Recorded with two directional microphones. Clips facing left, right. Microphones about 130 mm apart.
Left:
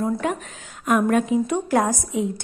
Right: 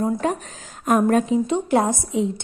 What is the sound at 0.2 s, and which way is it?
A woman's voice, 35° right (ahead or behind).